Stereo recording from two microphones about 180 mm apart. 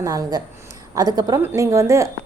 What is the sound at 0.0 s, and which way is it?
A woman's voice, 20° right (ahead or behind).